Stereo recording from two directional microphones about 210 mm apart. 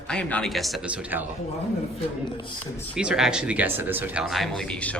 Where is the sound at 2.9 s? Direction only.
5° right (ahead or behind).